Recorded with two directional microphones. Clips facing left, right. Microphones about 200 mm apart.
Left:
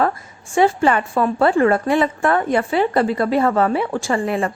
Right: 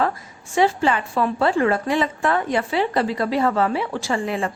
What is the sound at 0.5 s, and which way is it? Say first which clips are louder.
A woman's voice: left 3 dB; 50° left (ahead or behind).